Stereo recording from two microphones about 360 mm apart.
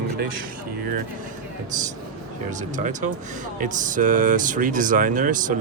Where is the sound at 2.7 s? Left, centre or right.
Centre.